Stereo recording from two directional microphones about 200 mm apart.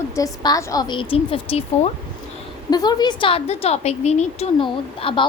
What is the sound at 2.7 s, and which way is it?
A woman's voice, 20° left (ahead or behind).